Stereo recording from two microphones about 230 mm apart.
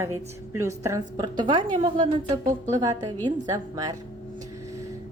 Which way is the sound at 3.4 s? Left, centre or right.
Centre.